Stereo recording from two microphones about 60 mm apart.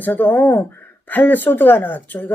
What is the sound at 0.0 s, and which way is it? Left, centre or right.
Speech, left.